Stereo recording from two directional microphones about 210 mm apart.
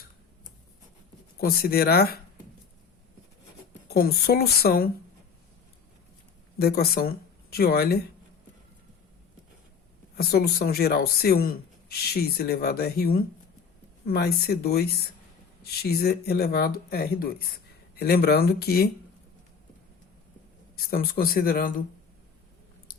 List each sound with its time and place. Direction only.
1.4 s speech: 45° left (ahead or behind)
3.8 s speech: 45° left (ahead or behind)
6.6 s speech: 45° left (ahead or behind)
10.2 s speech: 50° left (ahead or behind)
20.7 s speech: 45° left (ahead or behind)